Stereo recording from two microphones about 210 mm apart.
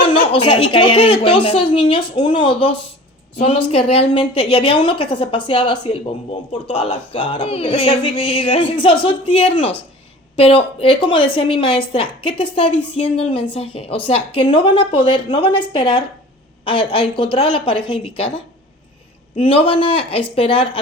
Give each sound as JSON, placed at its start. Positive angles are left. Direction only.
{"t": 0.1, "sound": "a woman's voice", "side_deg": 25}